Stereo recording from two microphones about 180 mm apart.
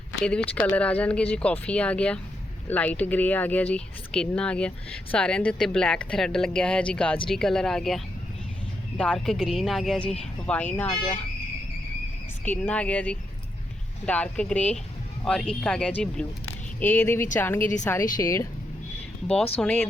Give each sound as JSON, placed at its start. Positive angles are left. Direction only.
{"t": 0.3, "sound": "speech", "side_deg": 10}
{"t": 12.5, "sound": "speech", "side_deg": 10}
{"t": 19.5, "sound": "speech", "side_deg": 5}